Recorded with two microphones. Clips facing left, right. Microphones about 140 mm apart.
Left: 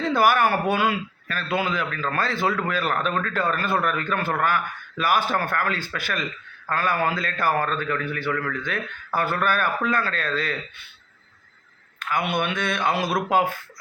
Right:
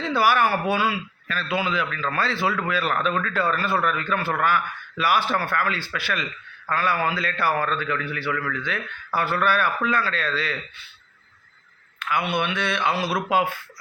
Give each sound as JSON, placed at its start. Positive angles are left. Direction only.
{"t": 0.0, "sound": "a man's voice", "side_deg": 50}
{"t": 11.9, "sound": "a man's voice", "side_deg": 45}